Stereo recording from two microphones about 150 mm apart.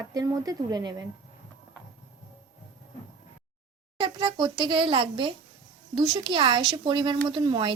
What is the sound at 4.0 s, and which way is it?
A child's voice, 25° right (ahead or behind).